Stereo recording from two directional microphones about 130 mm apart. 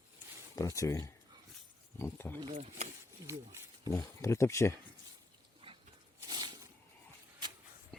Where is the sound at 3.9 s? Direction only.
20° left (ahead or behind).